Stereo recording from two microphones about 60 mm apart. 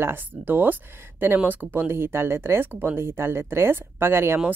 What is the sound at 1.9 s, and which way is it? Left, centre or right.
Speech, right.